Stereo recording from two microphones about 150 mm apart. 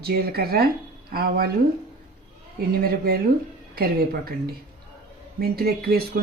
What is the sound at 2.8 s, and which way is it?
A woman's voice, 90° right.